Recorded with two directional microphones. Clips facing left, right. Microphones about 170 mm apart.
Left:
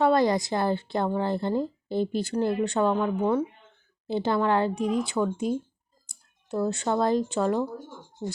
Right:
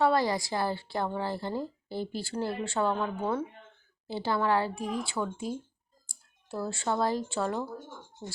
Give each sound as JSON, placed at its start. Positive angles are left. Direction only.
{"t": 0.0, "sound": "speech", "side_deg": 20}